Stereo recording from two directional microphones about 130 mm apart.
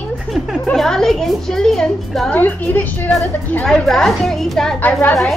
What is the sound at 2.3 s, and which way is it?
A woman's voice, 15° left (ahead or behind).